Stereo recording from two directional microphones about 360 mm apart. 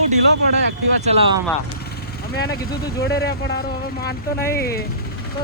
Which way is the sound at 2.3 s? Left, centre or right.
Left.